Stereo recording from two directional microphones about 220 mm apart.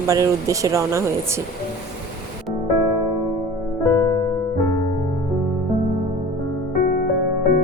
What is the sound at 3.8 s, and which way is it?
Music, 15° left (ahead or behind).